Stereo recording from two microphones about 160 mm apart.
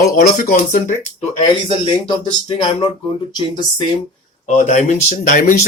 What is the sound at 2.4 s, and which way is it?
Speech, 35° left (ahead or behind).